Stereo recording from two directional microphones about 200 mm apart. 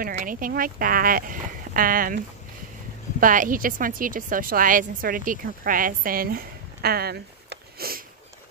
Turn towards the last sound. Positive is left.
turn(degrees=-50)  # may be behind; listen again after turning